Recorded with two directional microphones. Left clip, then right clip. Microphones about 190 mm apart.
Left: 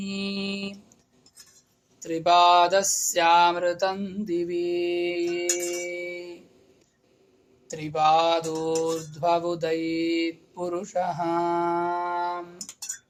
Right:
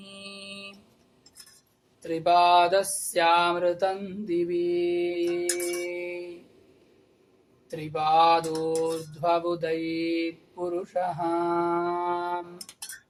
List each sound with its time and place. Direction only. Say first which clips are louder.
0.0 s mantra: left 10 dB; 40° left (ahead or behind)
2.0 s mantra: left 2 dB; 40° left (ahead or behind)
7.7 s mantra: left 3 dB; 45° left (ahead or behind)